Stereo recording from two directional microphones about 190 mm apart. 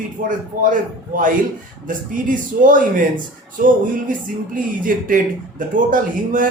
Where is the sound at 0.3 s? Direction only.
45° right (ahead or behind).